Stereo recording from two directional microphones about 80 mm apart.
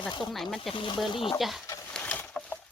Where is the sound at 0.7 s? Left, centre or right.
Left.